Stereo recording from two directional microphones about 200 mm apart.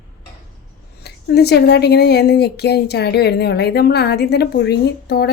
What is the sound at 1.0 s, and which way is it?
Speech, 55° left (ahead or behind).